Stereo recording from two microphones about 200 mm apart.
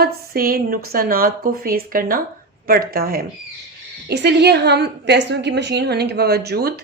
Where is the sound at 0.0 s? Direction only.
50° right (ahead or behind).